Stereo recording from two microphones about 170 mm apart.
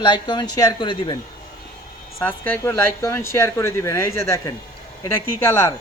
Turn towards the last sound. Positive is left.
turn(degrees=15)  # may be behind; listen again after turning